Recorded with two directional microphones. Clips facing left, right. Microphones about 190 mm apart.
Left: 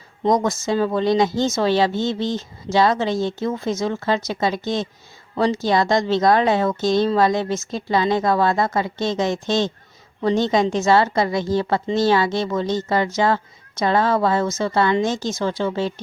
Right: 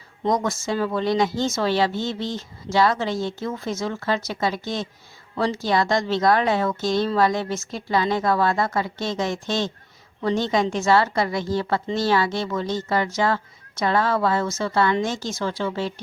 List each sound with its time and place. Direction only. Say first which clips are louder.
0.4 s a woman's voice: left 4 dB; 20° left (ahead or behind)